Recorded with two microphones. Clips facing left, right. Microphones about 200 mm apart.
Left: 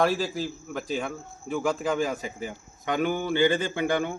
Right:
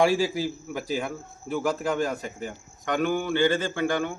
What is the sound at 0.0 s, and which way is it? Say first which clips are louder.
Speech: right 3 dB; 10° right (ahead or behind).